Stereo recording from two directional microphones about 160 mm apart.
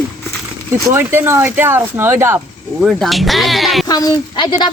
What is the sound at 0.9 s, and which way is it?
Speech, 15° right (ahead or behind).